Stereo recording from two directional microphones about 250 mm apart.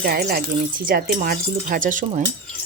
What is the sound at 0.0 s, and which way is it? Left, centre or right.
Speech, right.